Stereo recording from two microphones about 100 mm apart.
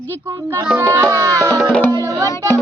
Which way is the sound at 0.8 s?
25° right (ahead or behind).